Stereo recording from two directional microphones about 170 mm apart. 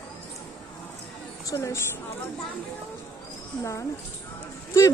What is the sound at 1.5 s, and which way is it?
Speech, 15° left (ahead or behind).